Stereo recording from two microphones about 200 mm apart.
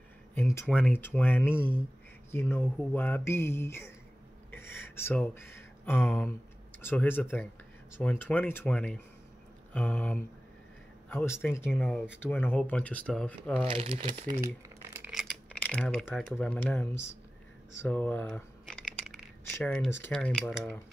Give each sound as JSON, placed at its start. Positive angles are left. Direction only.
{"t": 0.3, "sound": "speech", "side_deg": 10}
{"t": 13.7, "sound": "speech", "side_deg": -30}
{"t": 14.3, "sound": "a sound", "side_deg": -10}
{"t": 15.6, "sound": "speech", "side_deg": 5}
{"t": 17.7, "sound": "a sound", "side_deg": 10}
{"t": 19.9, "sound": "speech", "side_deg": 10}